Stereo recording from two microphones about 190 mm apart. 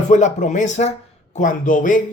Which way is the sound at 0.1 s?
40° left (ahead or behind).